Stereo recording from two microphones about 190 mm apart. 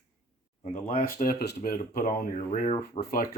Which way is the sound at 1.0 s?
45° left (ahead or behind).